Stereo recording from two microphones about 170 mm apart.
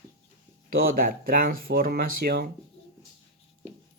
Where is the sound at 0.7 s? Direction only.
60° right (ahead or behind).